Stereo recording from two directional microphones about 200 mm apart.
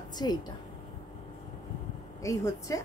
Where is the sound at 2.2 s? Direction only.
15° left (ahead or behind).